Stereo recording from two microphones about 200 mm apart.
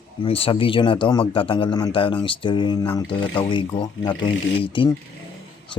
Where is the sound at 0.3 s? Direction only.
25° left (ahead or behind).